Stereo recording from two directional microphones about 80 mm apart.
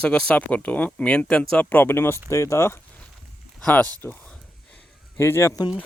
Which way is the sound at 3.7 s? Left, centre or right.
Centre.